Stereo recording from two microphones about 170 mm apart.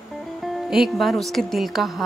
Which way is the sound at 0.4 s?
Centre (ahead or behind).